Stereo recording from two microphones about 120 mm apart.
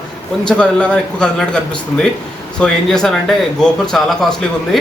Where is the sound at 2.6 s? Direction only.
5° left (ahead or behind).